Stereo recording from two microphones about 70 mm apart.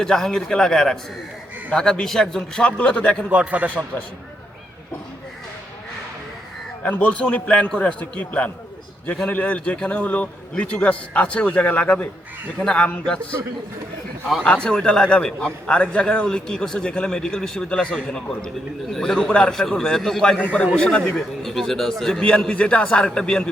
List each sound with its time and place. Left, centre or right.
0.0 s a man's voice: centre
3.2 s a man's voice: centre
6.8 s a man's voice: left
14.4 s a man's voice: centre
19.5 s speech: centre
20.4 s a man's voice: left